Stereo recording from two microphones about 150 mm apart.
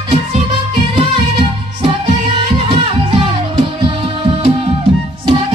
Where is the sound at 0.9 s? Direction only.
35° right (ahead or behind).